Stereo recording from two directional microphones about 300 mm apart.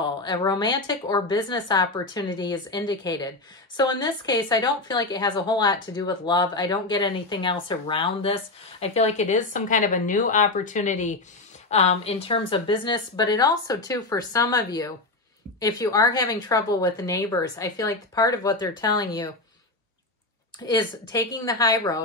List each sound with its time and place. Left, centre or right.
0.0 s speech: centre
20.5 s speech: centre